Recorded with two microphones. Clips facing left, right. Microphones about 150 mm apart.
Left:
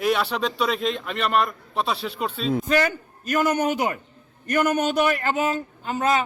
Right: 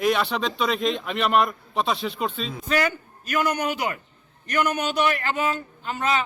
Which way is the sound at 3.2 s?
45° left (ahead or behind).